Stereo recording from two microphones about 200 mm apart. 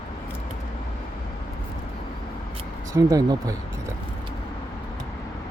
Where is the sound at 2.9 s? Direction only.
15° right (ahead or behind).